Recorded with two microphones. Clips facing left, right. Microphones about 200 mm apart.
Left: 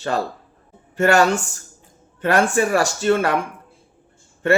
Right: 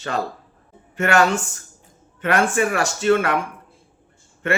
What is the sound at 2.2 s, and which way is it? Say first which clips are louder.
Speech: left 2 dB; 35° left (ahead or behind).